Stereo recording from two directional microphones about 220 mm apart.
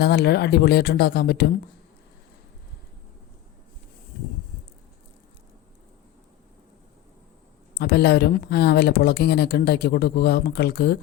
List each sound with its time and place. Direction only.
0.0 s speech: 45° left (ahead or behind)
7.8 s speech: 50° left (ahead or behind)